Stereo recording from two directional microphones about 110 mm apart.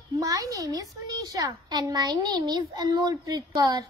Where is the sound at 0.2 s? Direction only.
35° right (ahead or behind).